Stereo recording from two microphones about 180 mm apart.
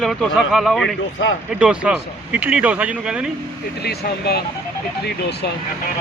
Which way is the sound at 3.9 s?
65° left (ahead or behind).